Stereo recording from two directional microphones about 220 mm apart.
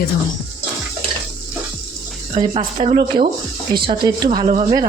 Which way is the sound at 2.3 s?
25° right (ahead or behind).